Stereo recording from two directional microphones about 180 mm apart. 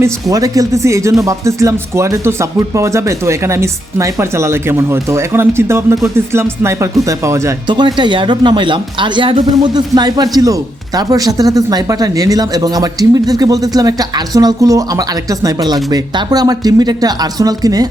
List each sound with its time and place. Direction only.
0.0 s speech: 20° right (ahead or behind)